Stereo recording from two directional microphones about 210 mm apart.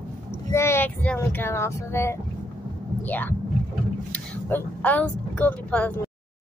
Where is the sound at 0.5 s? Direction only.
10° left (ahead or behind).